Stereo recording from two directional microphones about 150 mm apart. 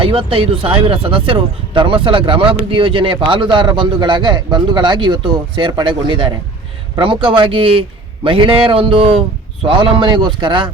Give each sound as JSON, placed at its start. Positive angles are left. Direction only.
{"t": 0.0, "sound": "speech", "side_deg": -35}